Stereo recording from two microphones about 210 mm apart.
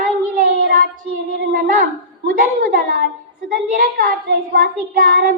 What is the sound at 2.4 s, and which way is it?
Child singing, 40° right (ahead or behind).